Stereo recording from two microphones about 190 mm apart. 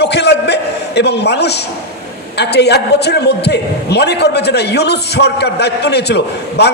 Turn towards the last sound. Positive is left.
turn(degrees=60)  # may be behind; listen again after turning